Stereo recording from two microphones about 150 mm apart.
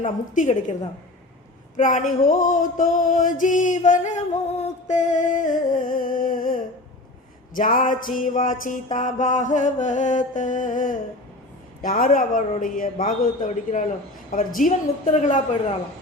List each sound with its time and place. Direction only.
0.0 s music: 60° left (ahead or behind)
1.7 s music: 60° left (ahead or behind)